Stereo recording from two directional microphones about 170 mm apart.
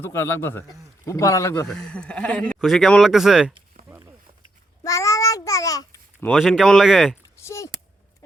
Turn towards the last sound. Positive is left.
turn(degrees=15)  # may be behind; listen again after turning